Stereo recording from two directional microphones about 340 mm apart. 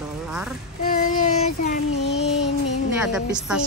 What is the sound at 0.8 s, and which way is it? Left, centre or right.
Child singing, left.